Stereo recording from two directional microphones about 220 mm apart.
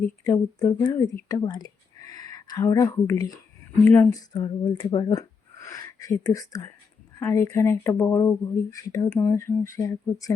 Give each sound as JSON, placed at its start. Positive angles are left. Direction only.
{"t": 0.3, "sound": "speech", "side_deg": 15}
{"t": 4.3, "sound": "speech", "side_deg": 20}